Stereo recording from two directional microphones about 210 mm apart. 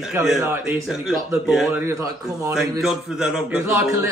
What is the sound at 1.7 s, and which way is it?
Speech, 15° right (ahead or behind).